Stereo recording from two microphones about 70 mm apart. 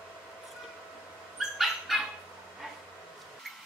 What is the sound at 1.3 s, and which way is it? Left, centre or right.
Dog, centre.